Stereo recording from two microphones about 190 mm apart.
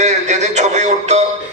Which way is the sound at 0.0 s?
40° right (ahead or behind).